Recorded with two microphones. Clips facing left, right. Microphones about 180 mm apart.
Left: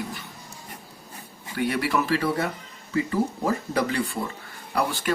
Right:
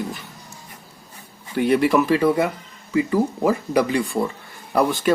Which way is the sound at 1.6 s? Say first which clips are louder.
Right 7 dB; 20° right (ahead or behind).